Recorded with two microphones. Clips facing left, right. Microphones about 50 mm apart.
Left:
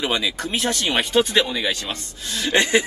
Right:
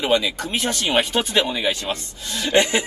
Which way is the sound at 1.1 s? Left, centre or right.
Right.